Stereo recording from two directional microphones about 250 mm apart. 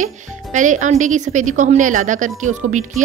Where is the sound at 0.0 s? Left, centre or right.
Right.